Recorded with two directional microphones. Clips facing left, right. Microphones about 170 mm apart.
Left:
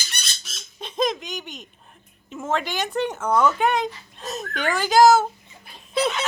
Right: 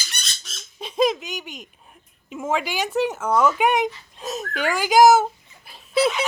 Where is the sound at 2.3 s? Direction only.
10° right (ahead or behind).